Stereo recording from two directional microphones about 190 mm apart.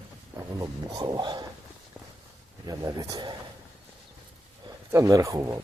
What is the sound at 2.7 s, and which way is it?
Speech, 20° right (ahead or behind).